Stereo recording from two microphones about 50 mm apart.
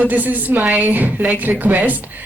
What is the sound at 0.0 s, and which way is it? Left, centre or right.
Speech, right.